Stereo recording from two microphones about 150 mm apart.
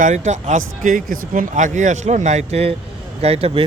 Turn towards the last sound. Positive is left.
turn(degrees=-40)  # may be behind; listen again after turning